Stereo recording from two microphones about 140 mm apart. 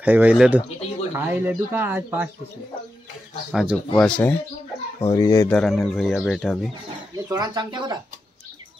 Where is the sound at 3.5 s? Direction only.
5° right (ahead or behind).